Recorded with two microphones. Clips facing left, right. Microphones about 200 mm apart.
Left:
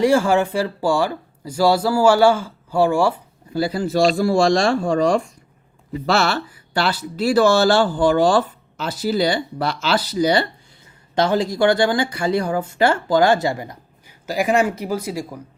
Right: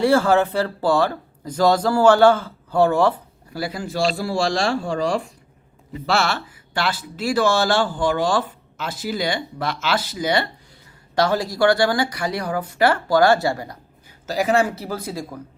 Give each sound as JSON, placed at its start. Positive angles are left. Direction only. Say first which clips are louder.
{"t": 0.0, "sound": "speech", "louder": "left 1 dB", "side_deg": 15}
{"t": 3.5, "sound": "speech", "louder": "left 6 dB", "side_deg": 30}
{"t": 3.9, "sound": "speech", "louder": "left 6 dB", "side_deg": 45}
{"t": 11.1, "sound": "speech", "louder": "left 2 dB", "side_deg": 20}